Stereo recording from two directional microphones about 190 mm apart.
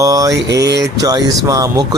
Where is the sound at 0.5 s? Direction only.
65° right (ahead or behind).